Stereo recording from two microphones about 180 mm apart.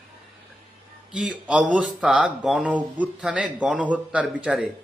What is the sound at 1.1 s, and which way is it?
Speech, 5° right (ahead or behind).